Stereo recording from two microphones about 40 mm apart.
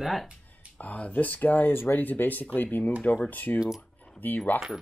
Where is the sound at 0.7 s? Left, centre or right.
Left.